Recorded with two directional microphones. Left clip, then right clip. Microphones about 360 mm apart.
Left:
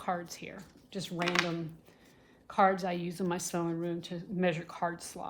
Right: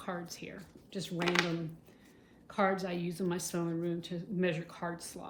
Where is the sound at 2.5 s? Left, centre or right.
Centre.